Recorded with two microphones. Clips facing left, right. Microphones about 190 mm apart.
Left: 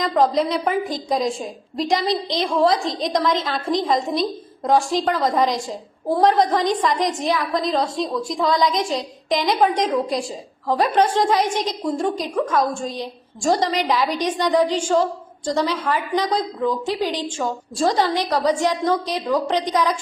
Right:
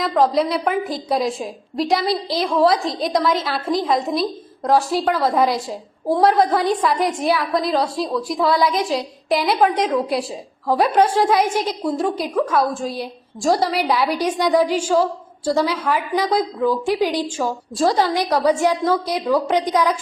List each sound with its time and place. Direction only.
0.1 s a woman's voice: centre (ahead or behind)